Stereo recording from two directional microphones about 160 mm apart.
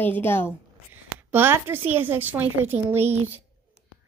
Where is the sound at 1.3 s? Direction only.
15° right (ahead or behind).